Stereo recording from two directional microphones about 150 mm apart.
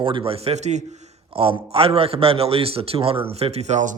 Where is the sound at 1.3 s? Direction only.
40° right (ahead or behind).